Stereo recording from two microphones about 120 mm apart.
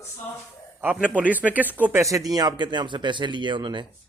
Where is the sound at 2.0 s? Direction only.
30° right (ahead or behind).